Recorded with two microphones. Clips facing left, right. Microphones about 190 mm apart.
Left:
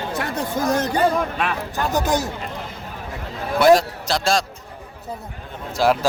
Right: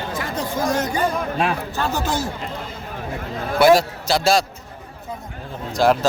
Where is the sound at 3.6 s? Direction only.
5° right (ahead or behind).